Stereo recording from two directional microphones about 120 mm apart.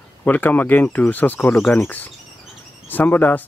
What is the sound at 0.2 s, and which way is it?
Speech, 15° left (ahead or behind).